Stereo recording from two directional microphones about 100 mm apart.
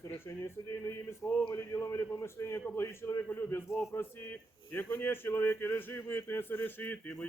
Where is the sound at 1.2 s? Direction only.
40° left (ahead or behind).